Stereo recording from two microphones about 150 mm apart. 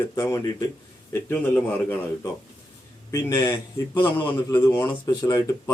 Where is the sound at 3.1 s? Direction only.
25° left (ahead or behind).